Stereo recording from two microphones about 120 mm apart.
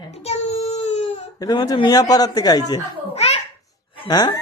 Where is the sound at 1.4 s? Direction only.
35° left (ahead or behind).